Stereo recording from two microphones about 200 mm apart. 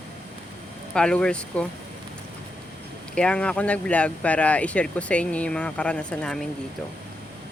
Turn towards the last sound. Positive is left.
turn(degrees=5)  # may be behind; listen again after turning